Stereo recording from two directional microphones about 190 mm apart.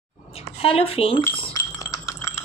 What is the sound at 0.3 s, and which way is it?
Speech, 30° left (ahead or behind).